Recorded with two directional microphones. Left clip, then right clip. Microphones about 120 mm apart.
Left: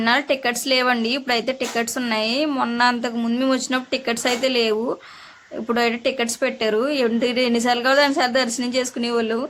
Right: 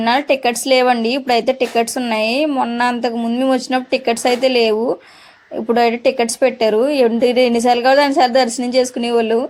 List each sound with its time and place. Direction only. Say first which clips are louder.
0.0 s speech: right 5 dB; 25° right (ahead or behind)
2.5 s a sound: right 4 dB; 10° right (ahead or behind)
2.7 s speech: right 2 dB; 25° right (ahead or behind)
3.2 s speech: right 5 dB; 10° right (ahead or behind); by 9.4 s 25° right (ahead or behind)